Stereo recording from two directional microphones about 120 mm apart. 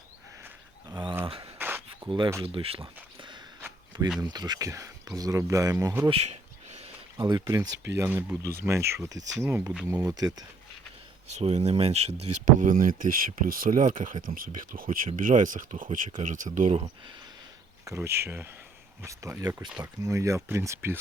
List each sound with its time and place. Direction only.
0.9 s a sound: 35° right (ahead or behind)
1.5 s a sound: 15° right (ahead or behind)
2.0 s speech: 45° right (ahead or behind)
3.2 s walk: 40° right (ahead or behind)
4.2 s speech: 35° right (ahead or behind)
6.1 s a sound: 60° right (ahead or behind)
7.2 s speech: 35° right (ahead or behind)
7.9 s speech: 20° right (ahead or behind)
11.3 s speech: 70° right (ahead or behind)
17.8 s speech: 25° right (ahead or behind)